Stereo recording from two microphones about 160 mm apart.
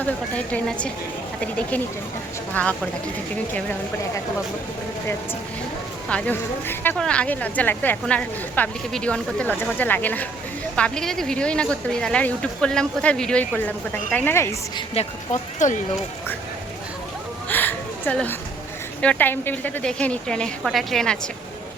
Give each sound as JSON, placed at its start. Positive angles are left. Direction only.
{"t": 0.0, "sound": "speech", "side_deg": 10}
{"t": 6.1, "sound": "speech", "side_deg": 10}
{"t": 14.8, "sound": "speech", "side_deg": 40}
{"t": 17.5, "sound": "a sound", "side_deg": 10}
{"t": 19.0, "sound": "speech", "side_deg": 10}